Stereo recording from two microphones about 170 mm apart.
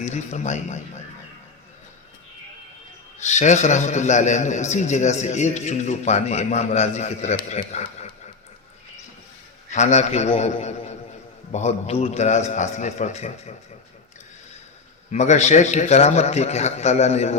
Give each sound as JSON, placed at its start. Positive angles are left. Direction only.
{"t": 0.0, "sound": "a man's voice", "side_deg": 45}
{"t": 3.2, "sound": "a man's voice", "side_deg": 45}
{"t": 9.6, "sound": "a man's voice", "side_deg": 40}
{"t": 15.1, "sound": "a man's voice", "side_deg": 40}